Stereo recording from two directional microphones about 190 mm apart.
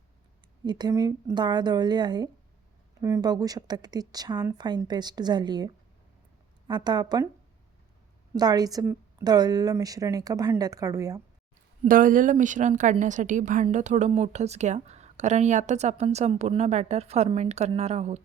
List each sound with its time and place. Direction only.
0.6 s a woman's voice: 20° right (ahead or behind)
8.4 s a woman's voice: 20° right (ahead or behind)
11.9 s a woman's voice: 45° right (ahead or behind)